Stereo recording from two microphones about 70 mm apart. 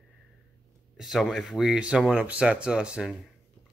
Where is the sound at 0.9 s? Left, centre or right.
Centre.